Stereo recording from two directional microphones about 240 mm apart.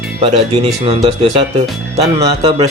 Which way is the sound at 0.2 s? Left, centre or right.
Right.